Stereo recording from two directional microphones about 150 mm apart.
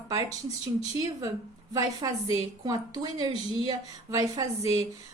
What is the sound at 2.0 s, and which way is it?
A woman's voice, 30° right (ahead or behind).